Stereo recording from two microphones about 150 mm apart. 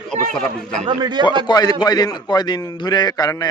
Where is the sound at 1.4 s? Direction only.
25° left (ahead or behind).